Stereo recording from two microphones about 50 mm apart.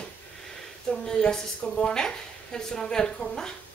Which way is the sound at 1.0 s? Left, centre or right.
Centre.